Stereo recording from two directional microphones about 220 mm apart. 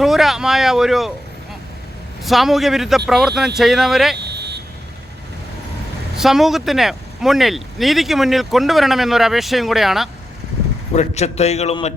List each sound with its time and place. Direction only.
0.0 s speech: centre (ahead or behind)
2.2 s speech: centre (ahead or behind)
4.2 s vehicle: 50° right (ahead or behind)
6.1 s speech: centre (ahead or behind)
10.9 s a man's voice: 30° left (ahead or behind)